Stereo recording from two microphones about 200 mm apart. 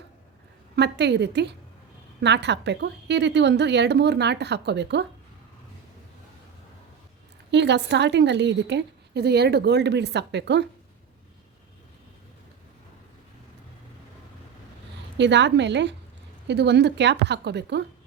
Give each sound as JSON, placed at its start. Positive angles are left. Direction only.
{"t": 0.8, "sound": "a woman's voice", "side_deg": -60}
{"t": 7.5, "sound": "a woman's voice", "side_deg": -60}
{"t": 15.2, "sound": "a woman's voice", "side_deg": -60}